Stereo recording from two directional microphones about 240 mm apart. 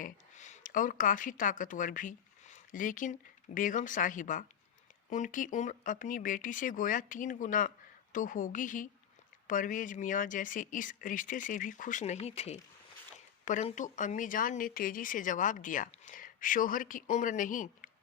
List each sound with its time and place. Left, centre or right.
0.0 s speech: left